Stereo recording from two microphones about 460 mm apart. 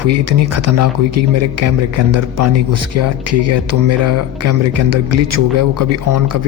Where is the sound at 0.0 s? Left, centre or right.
Right.